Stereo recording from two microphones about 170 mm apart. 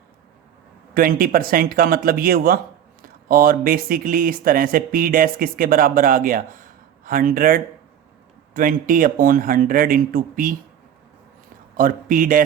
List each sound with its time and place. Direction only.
0.9 s speech: 60° right (ahead or behind)
11.8 s speech: 55° right (ahead or behind)